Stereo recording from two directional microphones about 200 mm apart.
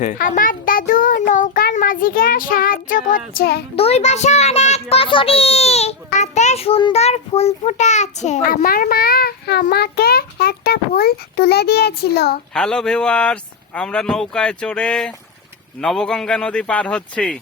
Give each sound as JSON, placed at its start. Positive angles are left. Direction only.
{"t": 0.0, "sound": "a sound", "side_deg": 40}
{"t": 3.8, "sound": "a child's voice", "side_deg": 30}
{"t": 12.5, "sound": "speech", "side_deg": 5}